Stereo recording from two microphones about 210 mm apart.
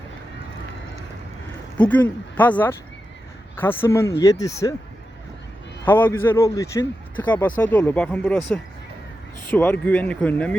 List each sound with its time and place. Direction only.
1.8 s a man's voice: 10° left (ahead or behind)
5.8 s a man's voice: 10° left (ahead or behind)